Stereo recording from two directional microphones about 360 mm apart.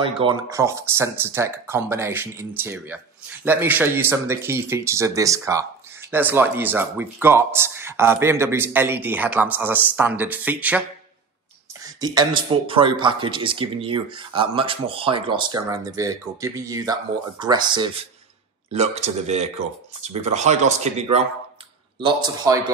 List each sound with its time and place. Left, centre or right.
0.0 s speech: centre
11.8 s speech: centre